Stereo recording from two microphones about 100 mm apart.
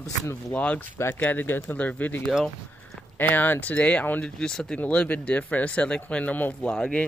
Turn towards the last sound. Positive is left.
turn(degrees=10)  # may be behind; listen again after turning